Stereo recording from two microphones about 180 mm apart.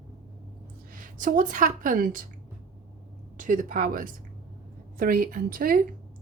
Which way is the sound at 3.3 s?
45° right (ahead or behind).